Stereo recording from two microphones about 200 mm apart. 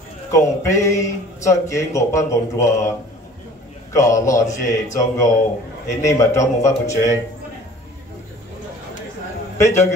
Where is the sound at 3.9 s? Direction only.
15° left (ahead or behind).